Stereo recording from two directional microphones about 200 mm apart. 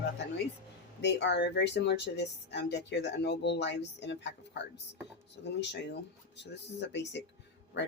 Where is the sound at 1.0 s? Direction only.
60° left (ahead or behind).